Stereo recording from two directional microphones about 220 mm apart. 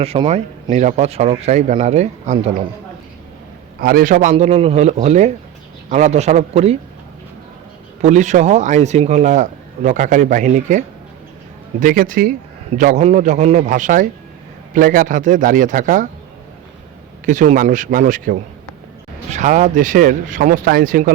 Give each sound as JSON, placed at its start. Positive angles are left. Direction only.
{"t": 0.0, "sound": "a man's voice", "side_deg": -25}
{"t": 3.8, "sound": "a man's voice", "side_deg": -40}
{"t": 8.0, "sound": "a man's voice", "side_deg": -35}
{"t": 17.2, "sound": "a man's voice", "side_deg": -35}